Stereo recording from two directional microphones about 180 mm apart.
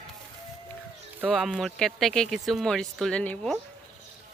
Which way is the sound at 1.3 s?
Centre (ahead or behind).